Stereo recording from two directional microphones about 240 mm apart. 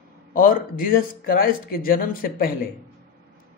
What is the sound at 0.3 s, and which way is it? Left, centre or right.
A man's voice, left.